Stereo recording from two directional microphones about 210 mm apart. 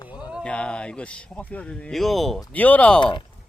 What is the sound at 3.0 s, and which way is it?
Speech, 20° left (ahead or behind).